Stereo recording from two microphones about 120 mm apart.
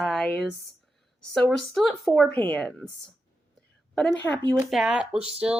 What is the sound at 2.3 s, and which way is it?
Speech, 10° left (ahead or behind).